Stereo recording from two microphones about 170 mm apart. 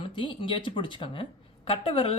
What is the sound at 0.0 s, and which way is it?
Speech, 30° left (ahead or behind).